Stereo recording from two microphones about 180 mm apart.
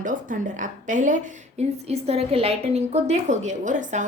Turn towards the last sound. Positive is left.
turn(degrees=-45)  # may be behind; listen again after turning